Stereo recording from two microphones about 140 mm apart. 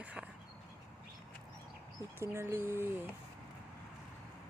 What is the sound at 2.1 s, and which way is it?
Speech, 15° right (ahead or behind).